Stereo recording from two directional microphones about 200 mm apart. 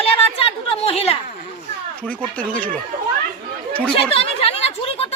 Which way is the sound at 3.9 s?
30° left (ahead or behind).